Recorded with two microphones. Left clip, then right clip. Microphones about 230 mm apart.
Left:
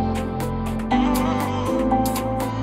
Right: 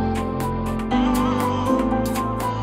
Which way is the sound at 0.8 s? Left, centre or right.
Right.